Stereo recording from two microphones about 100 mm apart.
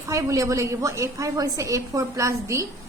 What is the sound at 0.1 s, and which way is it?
A woman's voice, 35° right (ahead or behind).